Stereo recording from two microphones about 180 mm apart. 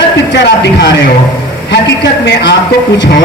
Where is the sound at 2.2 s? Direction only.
70° left (ahead or behind).